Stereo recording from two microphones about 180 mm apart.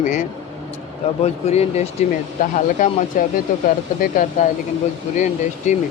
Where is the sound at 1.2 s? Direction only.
35° left (ahead or behind).